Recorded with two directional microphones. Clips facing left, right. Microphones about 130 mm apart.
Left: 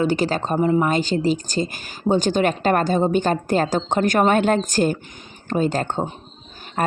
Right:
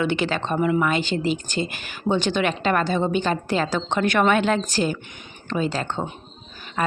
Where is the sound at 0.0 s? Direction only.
40° left (ahead or behind).